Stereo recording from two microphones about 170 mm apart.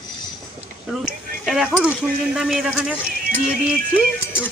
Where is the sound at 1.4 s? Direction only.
Centre (ahead or behind).